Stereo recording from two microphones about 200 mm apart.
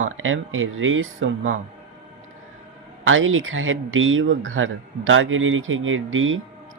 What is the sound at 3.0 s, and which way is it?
Speech, 80° right.